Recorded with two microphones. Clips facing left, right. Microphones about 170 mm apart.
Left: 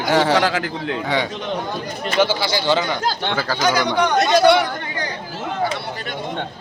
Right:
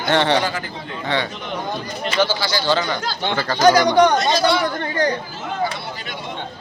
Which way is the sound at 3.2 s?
Centre (ahead or behind).